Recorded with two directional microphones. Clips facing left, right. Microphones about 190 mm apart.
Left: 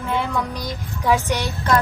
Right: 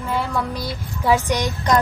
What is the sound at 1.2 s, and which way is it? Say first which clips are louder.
Speech: right 2 dB; 15° right (ahead or behind).